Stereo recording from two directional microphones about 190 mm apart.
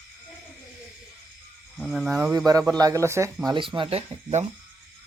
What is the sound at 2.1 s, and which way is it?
Speech, 15° right (ahead or behind).